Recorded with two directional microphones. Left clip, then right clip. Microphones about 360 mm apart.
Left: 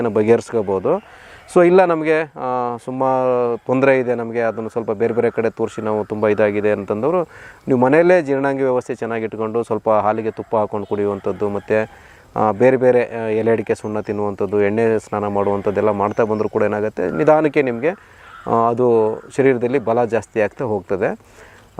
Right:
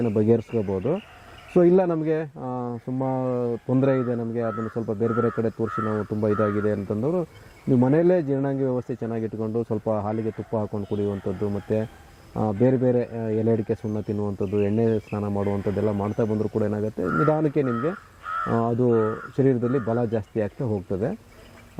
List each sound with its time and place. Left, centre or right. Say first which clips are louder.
0.0 s speech: left 7 dB; centre
18.4 s speech: left 9 dB; centre